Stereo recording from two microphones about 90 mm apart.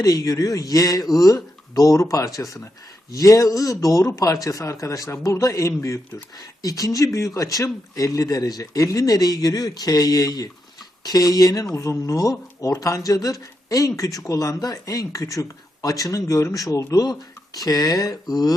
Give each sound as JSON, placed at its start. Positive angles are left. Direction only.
{"t": 0.0, "sound": "speech", "side_deg": 40}